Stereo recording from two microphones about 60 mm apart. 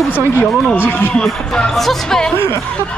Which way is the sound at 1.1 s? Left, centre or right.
Centre.